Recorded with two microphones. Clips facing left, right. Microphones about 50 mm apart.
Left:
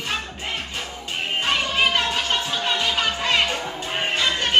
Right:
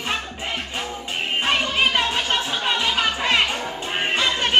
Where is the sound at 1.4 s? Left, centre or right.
Centre.